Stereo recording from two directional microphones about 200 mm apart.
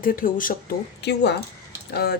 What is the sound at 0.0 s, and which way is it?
Speech, 45° left (ahead or behind).